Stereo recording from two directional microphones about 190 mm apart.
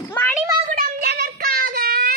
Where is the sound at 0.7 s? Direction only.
50° right (ahead or behind).